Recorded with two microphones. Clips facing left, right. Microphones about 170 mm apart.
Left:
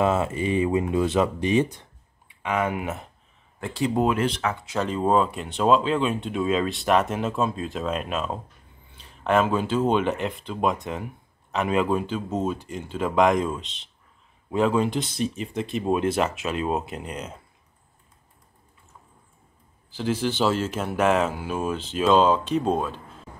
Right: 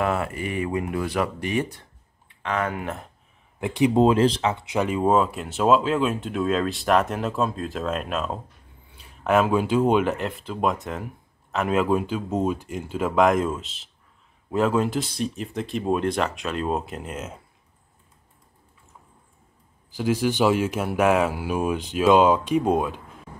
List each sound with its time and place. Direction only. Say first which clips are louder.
0.0 s speech: left 3 dB; 20° left (ahead or behind)
2.2 s speech: left 1 dB; 10° left (ahead or behind)
3.5 s speech: right 5 dB; 15° right (ahead or behind)
20.0 s speech: right 3 dB; 10° right (ahead or behind)